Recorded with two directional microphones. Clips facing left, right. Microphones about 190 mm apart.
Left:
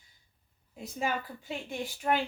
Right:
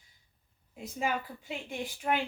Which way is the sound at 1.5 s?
15° right (ahead or behind).